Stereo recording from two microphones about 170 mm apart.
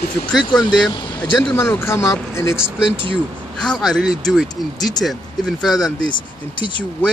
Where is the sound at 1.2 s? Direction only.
10° left (ahead or behind).